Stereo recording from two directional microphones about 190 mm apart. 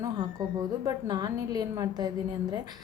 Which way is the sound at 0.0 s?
20° right (ahead or behind).